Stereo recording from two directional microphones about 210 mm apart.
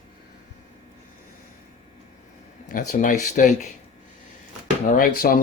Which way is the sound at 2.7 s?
40° left (ahead or behind).